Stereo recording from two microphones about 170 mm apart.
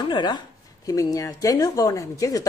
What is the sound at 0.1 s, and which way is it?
A woman's voice, 25° left (ahead or behind).